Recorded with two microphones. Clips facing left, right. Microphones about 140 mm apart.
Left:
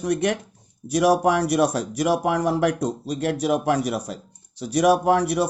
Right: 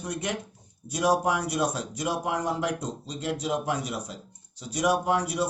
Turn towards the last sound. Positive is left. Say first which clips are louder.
# left 6 dB
turn(degrees=70)  # may be behind; listen again after turning